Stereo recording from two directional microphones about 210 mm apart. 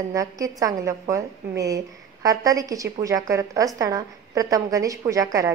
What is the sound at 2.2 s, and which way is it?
A woman's voice, 15° right (ahead or behind).